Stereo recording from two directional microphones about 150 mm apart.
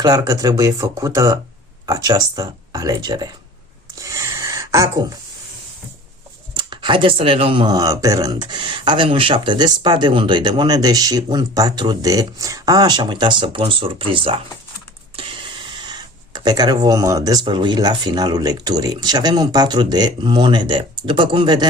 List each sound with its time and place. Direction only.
0.0 s speech: 25° right (ahead or behind)
4.0 s a sound: 20° right (ahead or behind)
6.6 s speech: 30° right (ahead or behind)